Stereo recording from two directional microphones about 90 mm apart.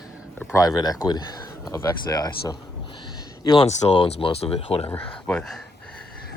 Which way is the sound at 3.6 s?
85° left.